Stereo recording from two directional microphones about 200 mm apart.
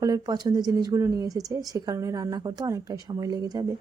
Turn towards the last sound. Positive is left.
turn(degrees=-20)  # may be behind; listen again after turning